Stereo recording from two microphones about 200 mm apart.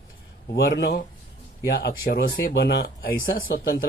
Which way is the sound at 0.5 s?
50° left (ahead or behind).